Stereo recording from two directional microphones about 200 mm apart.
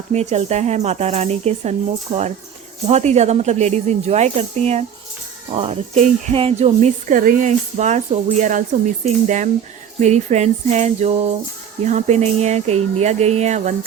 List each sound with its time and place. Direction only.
0.1 s speech: 35° right (ahead or behind)
2.8 s speech: 35° right (ahead or behind)